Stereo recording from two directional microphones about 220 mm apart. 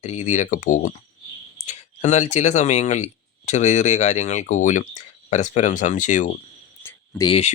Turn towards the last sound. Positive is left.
turn(degrees=30)  # may be behind; listen again after turning